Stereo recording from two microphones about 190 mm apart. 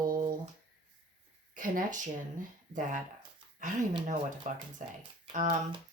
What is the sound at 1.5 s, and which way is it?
Speech, 45° right (ahead or behind).